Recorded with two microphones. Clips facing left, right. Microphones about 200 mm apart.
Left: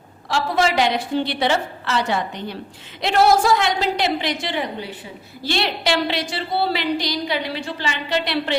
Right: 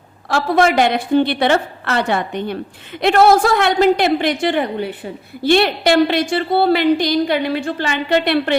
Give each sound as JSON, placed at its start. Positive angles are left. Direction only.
{"t": 0.3, "sound": "a woman's voice", "side_deg": -55}